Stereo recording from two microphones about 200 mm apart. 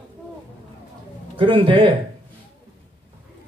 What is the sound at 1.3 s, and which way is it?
Speech, 25° right (ahead or behind).